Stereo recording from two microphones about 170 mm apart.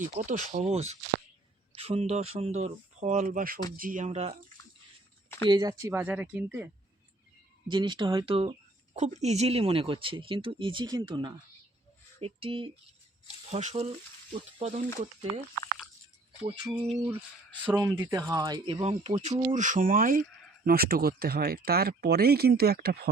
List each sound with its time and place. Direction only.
0.0 s a woman's voice: 45° right (ahead or behind)
5.5 s speech: 25° right (ahead or behind)
7.7 s a woman's voice: 25° right (ahead or behind)
16.4 s speech: 25° right (ahead or behind)
18.0 s speech: 20° right (ahead or behind)
18.8 s a woman's voice: 40° right (ahead or behind); by 23.0 s 65° right (ahead or behind)